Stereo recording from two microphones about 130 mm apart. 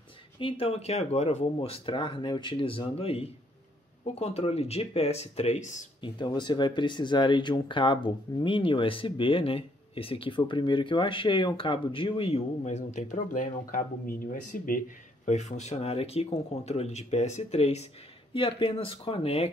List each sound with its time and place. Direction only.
0.4 s speech: 45° left (ahead or behind); by 5.9 s 70° left (ahead or behind)
6.0 s speech: 35° left (ahead or behind); by 14.8 s 90° left
15.2 s speech: 65° left (ahead or behind)
18.3 s speech: 45° left (ahead or behind)